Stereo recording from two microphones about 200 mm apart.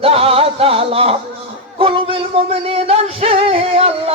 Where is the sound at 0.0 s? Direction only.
30° right (ahead or behind).